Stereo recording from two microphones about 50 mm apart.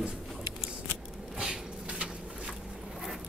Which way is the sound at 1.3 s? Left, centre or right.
Centre.